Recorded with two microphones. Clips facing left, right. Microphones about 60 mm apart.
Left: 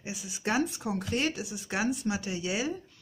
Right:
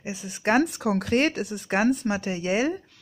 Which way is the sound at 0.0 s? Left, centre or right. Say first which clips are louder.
Right 5 dB; right.